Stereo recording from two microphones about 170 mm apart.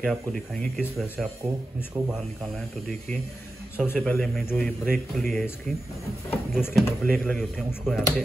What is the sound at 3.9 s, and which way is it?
A man's voice, 5° left (ahead or behind).